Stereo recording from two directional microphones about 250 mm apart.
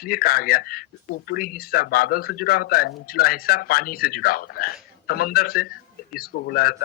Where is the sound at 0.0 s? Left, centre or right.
Left.